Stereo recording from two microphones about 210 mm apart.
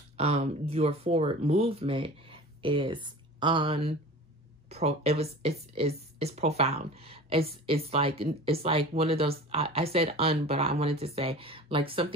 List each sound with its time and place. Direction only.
0.2 s speech: 30° right (ahead or behind)